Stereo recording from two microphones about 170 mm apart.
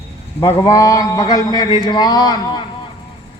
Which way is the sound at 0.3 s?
20° left (ahead or behind).